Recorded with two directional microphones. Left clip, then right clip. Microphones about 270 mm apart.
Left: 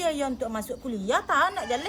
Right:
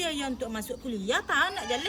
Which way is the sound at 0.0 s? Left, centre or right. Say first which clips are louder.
Left 4 dB; centre.